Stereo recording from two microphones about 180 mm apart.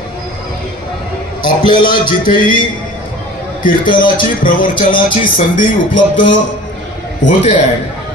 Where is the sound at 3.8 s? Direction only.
25° left (ahead or behind).